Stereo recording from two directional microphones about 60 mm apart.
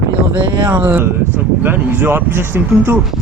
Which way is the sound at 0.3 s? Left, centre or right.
Right.